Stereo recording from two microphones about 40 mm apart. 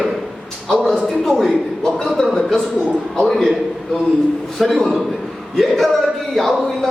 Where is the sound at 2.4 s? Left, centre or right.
Centre.